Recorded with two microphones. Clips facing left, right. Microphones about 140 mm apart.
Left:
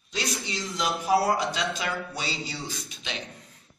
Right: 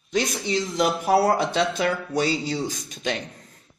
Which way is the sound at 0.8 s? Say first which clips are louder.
Right 4 dB; 55° right (ahead or behind).